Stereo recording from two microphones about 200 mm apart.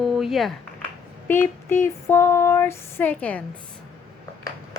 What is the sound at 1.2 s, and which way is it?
Female singing, 10° left (ahead or behind).